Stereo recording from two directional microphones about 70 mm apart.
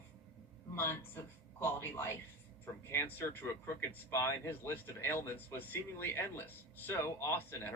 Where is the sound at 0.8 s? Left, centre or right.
Left.